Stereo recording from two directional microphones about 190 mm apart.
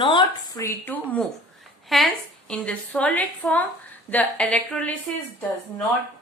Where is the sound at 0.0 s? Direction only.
25° left (ahead or behind); by 4.9 s 5° left (ahead or behind).